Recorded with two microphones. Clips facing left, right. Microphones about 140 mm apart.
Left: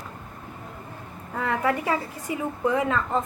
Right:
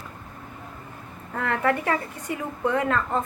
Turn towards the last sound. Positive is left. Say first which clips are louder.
# even
turn(degrees=5)  # may be behind; listen again after turning